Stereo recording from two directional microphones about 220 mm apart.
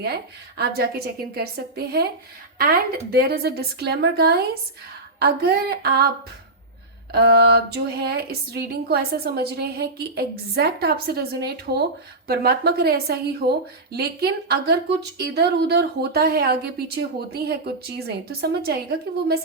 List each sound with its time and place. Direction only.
0.0 s a woman's voice: 45° right (ahead or behind)
7.1 s a woman's voice: 45° right (ahead or behind)